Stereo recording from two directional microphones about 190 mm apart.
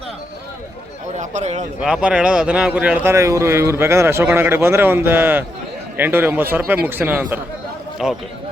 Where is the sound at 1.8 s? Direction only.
5° right (ahead or behind).